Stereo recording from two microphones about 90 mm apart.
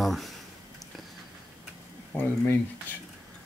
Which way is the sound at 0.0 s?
Centre (ahead or behind).